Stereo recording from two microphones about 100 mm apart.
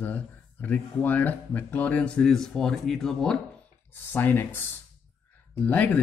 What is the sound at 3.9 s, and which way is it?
Speech, 20° left (ahead or behind).